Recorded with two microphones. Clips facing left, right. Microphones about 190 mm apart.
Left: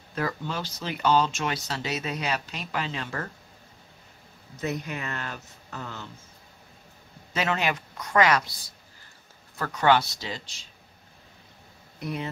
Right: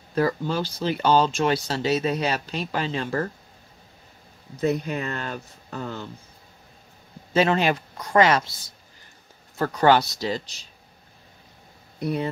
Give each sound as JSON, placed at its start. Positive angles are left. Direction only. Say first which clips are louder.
{"t": 0.1, "sound": "speech", "louder": "right 7 dB", "side_deg": -35}
{"t": 4.6, "sound": "speech", "louder": "right 7 dB", "side_deg": -35}
{"t": 7.3, "sound": "speech", "louder": "right 7 dB", "side_deg": -30}
{"t": 9.6, "sound": "speech", "louder": "right 4 dB", "side_deg": -35}
{"t": 12.0, "sound": "speech", "louder": "right 6 dB", "side_deg": -35}